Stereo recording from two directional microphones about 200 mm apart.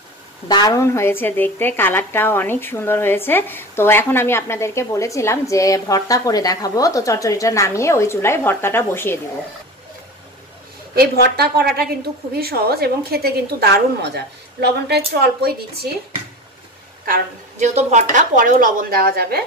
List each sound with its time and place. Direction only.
0.5 s a woman's voice: 20° left (ahead or behind)
11.0 s a woman's voice: 50° right (ahead or behind)
17.0 s a woman's voice: 40° right (ahead or behind)